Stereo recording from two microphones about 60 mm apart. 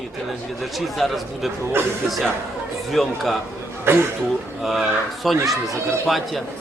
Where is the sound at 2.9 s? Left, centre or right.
Centre.